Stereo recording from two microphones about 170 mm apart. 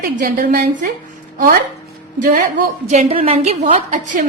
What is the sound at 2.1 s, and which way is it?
Speech, 55° right (ahead or behind).